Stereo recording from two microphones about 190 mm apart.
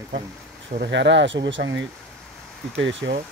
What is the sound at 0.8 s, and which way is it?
Speech, 70° right (ahead or behind).